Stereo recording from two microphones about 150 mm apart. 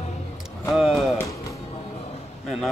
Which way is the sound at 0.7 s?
Centre (ahead or behind).